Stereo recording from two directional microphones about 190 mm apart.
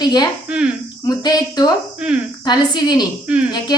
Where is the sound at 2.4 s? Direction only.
20° left (ahead or behind).